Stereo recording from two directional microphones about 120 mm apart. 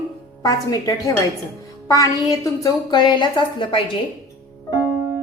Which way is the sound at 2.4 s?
30° left (ahead or behind).